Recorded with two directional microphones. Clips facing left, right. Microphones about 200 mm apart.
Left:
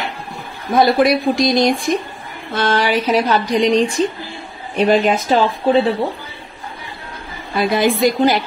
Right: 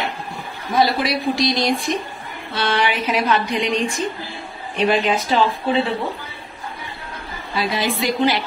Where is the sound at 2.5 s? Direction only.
45° left (ahead or behind).